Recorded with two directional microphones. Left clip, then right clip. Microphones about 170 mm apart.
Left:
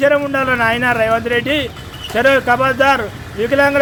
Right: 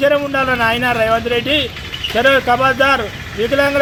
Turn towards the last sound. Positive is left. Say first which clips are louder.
# left 1 dB
turn(degrees=10)  # may be behind; listen again after turning